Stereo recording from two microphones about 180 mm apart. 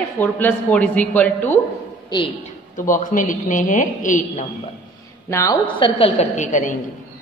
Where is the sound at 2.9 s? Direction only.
45° left (ahead or behind).